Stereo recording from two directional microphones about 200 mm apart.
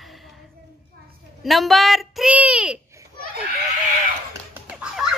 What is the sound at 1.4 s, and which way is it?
A woman's voice, centre (ahead or behind).